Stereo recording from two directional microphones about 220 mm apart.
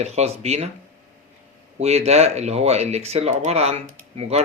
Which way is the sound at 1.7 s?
30° right (ahead or behind).